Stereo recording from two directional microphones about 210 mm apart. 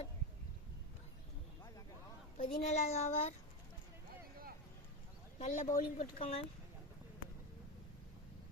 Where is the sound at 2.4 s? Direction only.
35° left (ahead or behind).